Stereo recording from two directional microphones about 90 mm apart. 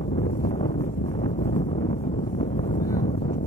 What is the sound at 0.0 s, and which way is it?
Wind noise, 75° left (ahead or behind).